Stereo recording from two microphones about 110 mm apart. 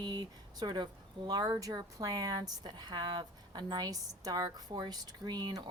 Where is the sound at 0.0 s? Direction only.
40° right (ahead or behind).